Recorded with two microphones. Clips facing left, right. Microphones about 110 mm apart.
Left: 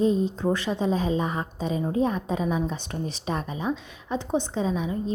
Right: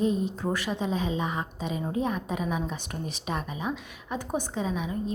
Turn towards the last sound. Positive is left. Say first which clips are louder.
# left 3 dB
turn(degrees=30)  # may be behind; listen again after turning